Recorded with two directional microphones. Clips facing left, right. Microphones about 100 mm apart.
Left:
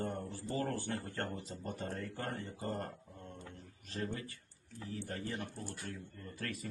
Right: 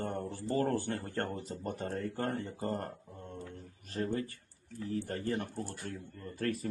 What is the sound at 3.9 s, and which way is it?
Speech, 45° right (ahead or behind).